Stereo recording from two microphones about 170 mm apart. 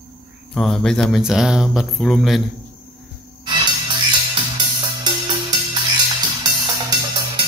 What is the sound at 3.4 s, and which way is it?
Music, 25° right (ahead or behind).